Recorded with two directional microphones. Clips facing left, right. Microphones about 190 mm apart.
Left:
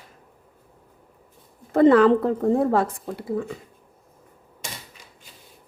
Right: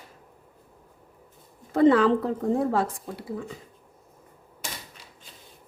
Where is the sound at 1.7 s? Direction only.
55° left (ahead or behind).